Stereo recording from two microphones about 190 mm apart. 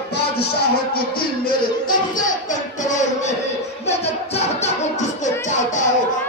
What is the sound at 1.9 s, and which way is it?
Music, 45° left (ahead or behind).